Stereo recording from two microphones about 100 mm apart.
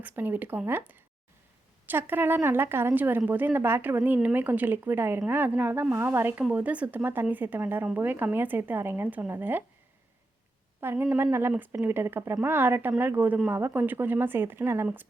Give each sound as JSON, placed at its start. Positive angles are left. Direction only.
{"t": 0.0, "sound": "a woman's voice", "side_deg": -20}
{"t": 10.8, "sound": "speech", "side_deg": -20}